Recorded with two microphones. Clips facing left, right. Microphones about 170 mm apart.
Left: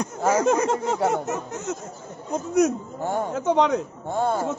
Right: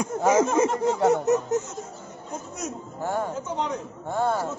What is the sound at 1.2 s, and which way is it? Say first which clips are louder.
Speech: right 7 dB; 40° right (ahead or behind).